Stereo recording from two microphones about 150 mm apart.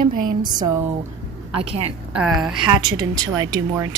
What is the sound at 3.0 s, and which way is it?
Speech, 25° right (ahead or behind).